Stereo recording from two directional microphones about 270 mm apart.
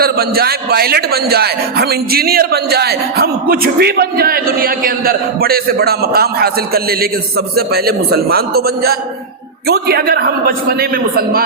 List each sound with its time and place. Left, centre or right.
0.0 s a man's voice: right